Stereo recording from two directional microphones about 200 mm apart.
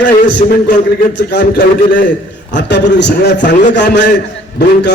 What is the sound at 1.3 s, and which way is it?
A man's voice, 50° left (ahead or behind).